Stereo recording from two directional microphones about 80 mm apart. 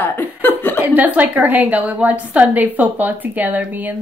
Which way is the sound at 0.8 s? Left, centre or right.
Right.